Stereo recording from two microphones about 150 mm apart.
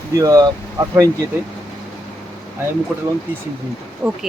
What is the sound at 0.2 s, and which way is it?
Speech, 25° right (ahead or behind).